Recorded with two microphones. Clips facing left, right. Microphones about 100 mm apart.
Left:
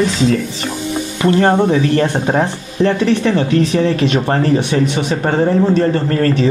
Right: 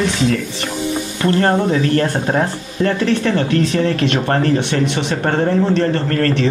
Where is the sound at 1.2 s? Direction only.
15° left (ahead or behind).